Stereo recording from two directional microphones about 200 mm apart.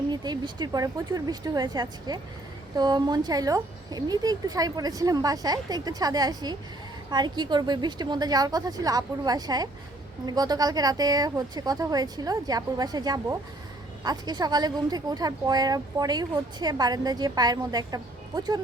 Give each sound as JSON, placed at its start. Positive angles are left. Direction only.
{"t": 0.1, "sound": "a woman's voice", "side_deg": -20}